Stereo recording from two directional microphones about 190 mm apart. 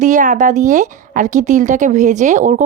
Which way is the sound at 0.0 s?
40° right (ahead or behind).